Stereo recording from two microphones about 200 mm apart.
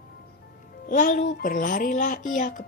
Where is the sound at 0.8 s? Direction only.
40° left (ahead or behind).